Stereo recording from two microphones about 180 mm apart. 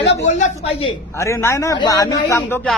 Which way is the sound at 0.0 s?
35° left (ahead or behind).